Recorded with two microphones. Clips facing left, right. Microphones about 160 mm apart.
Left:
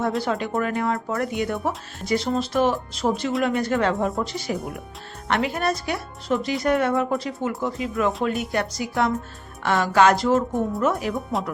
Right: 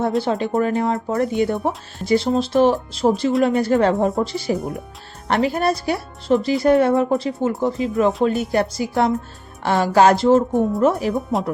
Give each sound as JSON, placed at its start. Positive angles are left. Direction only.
{"t": 0.2, "sound": "speech", "side_deg": -30}